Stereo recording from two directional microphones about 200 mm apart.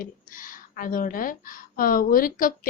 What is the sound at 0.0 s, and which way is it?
A woman's voice, 45° left (ahead or behind).